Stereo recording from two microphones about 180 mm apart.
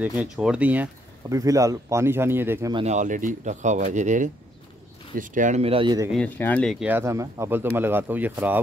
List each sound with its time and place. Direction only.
0.0 s speech: 5° right (ahead or behind)
1.3 s speech: 20° right (ahead or behind)
2.7 s speech: 40° right (ahead or behind)
6.1 s speech: 10° left (ahead or behind)
6.9 s speech: 15° right (ahead or behind)